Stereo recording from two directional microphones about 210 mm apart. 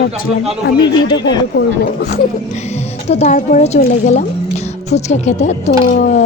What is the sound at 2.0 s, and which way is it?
Speech, 50° left (ahead or behind).